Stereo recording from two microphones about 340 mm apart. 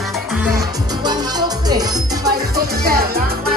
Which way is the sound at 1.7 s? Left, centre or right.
Centre.